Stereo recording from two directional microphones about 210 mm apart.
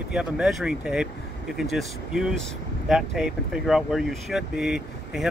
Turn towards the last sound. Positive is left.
turn(degrees=-5)  # may be behind; listen again after turning